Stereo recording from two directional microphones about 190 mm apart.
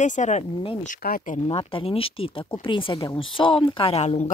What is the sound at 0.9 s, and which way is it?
Speech, 50° left (ahead or behind).